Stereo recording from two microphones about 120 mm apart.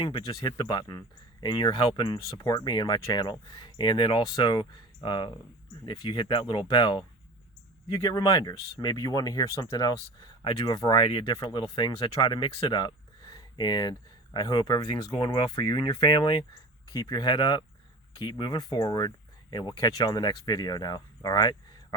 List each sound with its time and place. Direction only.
0.0 s speech: 45° left (ahead or behind)
4.2 s speech: 30° left (ahead or behind)